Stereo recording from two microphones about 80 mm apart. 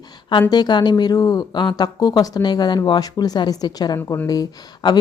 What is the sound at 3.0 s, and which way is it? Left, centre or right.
A woman's voice, left.